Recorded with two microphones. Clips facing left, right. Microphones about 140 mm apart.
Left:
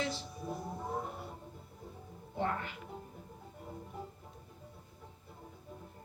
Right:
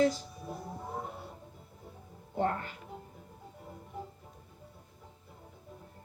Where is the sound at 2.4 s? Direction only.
45° right (ahead or behind).